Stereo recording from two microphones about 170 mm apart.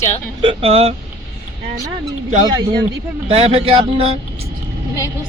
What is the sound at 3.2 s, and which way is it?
Speech, 35° right (ahead or behind).